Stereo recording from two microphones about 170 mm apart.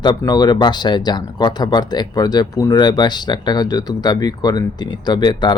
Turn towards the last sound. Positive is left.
turn(degrees=25)  # may be behind; listen again after turning